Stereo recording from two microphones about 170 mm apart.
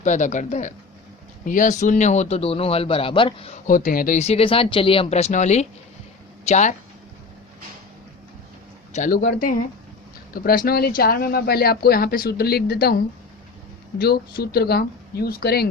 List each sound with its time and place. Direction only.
0.0 s a man's voice: 45° left (ahead or behind)
3.7 s a man's voice: 55° left (ahead or behind)
8.9 s speech: 50° left (ahead or behind)
14.0 s speech: 65° left (ahead or behind)